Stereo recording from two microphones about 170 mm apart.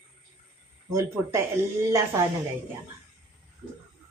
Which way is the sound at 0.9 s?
20° right (ahead or behind).